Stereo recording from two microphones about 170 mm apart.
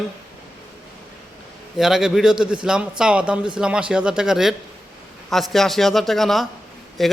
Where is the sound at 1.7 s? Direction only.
Centre (ahead or behind).